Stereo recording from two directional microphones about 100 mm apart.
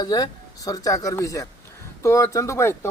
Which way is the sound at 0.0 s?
40° left (ahead or behind).